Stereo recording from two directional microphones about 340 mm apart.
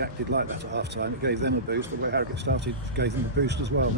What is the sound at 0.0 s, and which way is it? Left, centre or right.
Speech, right.